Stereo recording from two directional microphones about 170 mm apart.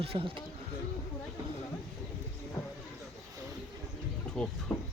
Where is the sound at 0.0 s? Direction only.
35° right (ahead or behind).